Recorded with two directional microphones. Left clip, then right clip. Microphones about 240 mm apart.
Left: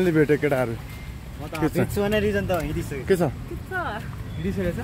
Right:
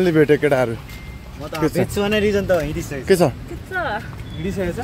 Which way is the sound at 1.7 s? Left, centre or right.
Right.